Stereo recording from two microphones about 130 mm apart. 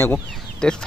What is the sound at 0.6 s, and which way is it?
Speech, 5° left (ahead or behind).